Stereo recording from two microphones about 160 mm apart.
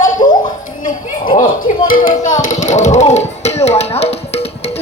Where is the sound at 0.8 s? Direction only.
55° left (ahead or behind).